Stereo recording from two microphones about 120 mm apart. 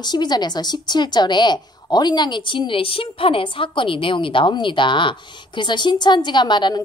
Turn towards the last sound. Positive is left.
turn(degrees=40)  # may be behind; listen again after turning